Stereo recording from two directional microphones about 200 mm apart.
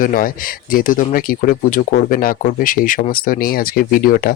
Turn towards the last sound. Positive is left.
turn(degrees=45)  # may be behind; listen again after turning